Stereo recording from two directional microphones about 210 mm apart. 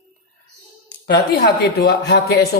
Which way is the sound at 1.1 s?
50° left (ahead or behind).